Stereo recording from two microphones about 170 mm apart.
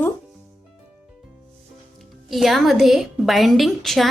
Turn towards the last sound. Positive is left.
turn(degrees=0)  # may be behind; listen again after turning